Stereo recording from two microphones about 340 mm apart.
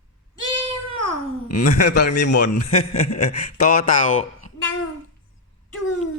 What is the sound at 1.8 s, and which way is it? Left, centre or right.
Speech, left.